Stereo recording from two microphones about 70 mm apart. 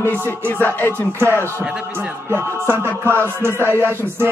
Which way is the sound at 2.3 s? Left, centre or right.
Right.